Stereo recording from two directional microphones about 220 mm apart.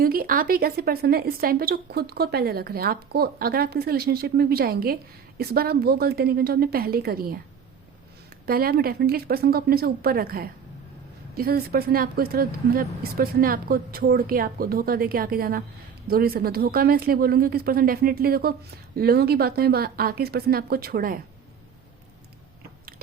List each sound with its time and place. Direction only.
0.0 s a woman's voice: 40° right (ahead or behind)
8.4 s a woman's voice: 45° right (ahead or behind)